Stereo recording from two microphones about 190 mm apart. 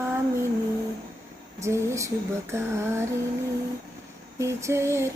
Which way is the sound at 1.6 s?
15° right (ahead or behind).